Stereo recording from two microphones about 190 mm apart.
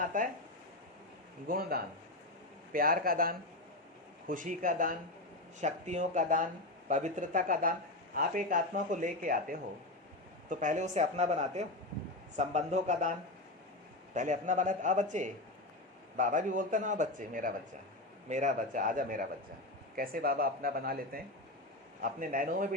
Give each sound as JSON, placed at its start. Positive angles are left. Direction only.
{"t": 0.0, "sound": "speech", "side_deg": -45}
{"t": 1.5, "sound": "a man's voice", "side_deg": -50}